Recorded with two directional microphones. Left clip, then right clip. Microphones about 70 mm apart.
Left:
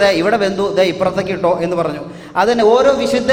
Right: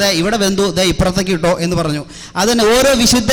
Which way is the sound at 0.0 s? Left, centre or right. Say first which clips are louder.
Left 2 dB; centre.